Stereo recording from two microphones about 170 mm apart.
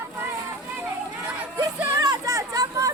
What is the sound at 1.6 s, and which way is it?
Hubbub, 20° right (ahead or behind).